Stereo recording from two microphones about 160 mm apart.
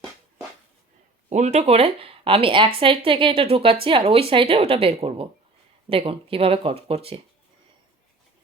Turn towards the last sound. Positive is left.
turn(degrees=-35)  # may be behind; listen again after turning